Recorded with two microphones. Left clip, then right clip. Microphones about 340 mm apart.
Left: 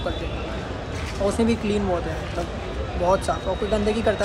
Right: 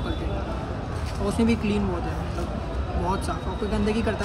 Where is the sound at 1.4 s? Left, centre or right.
Centre.